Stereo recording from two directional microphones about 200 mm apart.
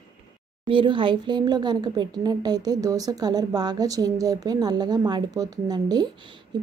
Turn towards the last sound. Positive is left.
turn(degrees=-20)  # may be behind; listen again after turning